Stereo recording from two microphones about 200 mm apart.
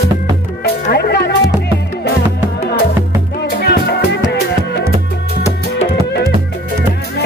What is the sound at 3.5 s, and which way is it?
Music, 55° left (ahead or behind).